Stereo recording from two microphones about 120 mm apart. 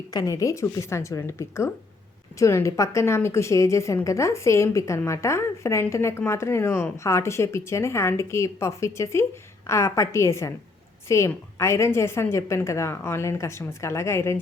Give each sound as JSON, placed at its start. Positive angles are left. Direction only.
{"t": 0.1, "sound": "a woman's voice", "side_deg": 30}